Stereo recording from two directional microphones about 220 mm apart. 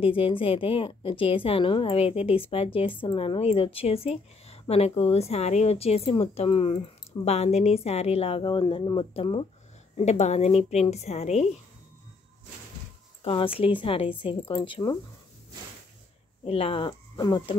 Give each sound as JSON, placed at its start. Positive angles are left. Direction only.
{"t": 0.0, "sound": "a woman's voice", "side_deg": 25}
{"t": 13.2, "sound": "a woman's voice", "side_deg": 25}
{"t": 16.4, "sound": "a woman's voice", "side_deg": 25}